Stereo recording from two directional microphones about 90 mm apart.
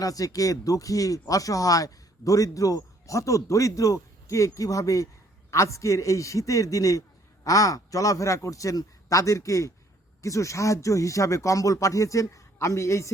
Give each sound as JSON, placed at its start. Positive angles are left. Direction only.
{"t": 0.0, "sound": "speech", "side_deg": 40}